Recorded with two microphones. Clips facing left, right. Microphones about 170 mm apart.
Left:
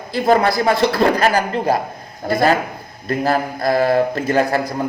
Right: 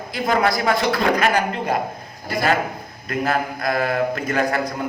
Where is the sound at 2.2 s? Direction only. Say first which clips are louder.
Left 6 dB; 55° left (ahead or behind).